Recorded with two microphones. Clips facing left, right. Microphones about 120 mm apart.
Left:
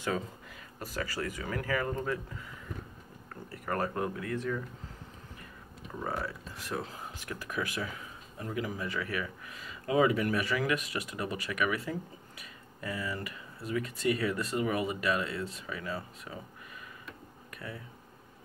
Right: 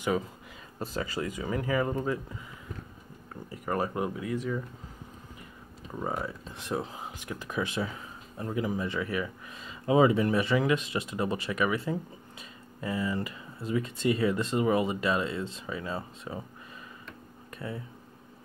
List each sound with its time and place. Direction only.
0.7 s speech: 25° right (ahead or behind)
3.4 s speech: 15° right (ahead or behind)
5.9 s speech: 15° right (ahead or behind)
17.6 s speech: 25° right (ahead or behind)